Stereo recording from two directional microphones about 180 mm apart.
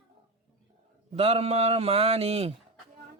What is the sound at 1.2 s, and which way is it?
Speech, 35° right (ahead or behind).